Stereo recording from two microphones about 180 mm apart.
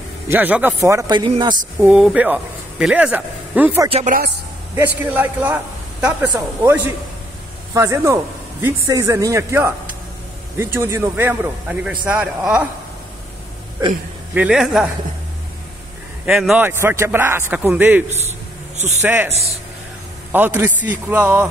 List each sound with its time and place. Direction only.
0.3 s speech: 10° right (ahead or behind); by 1.6 s 25° right (ahead or behind)
1.8 s speech: 5° right (ahead or behind)
3.9 s speech: 45° right (ahead or behind)
4.7 s a man's voice: 10° right (ahead or behind)
14.3 s a man's voice: 5° right (ahead or behind)
16.3 s speech: centre (ahead or behind)
20.3 s speech: 10° right (ahead or behind)